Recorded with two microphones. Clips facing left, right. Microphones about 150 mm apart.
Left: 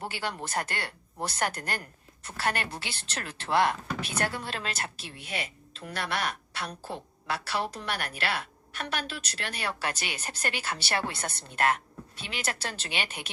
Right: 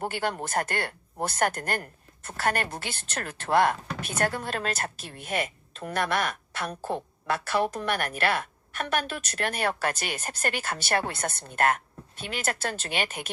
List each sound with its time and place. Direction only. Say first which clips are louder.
0.0 s a woman's voice: right 5 dB; 50° right (ahead or behind)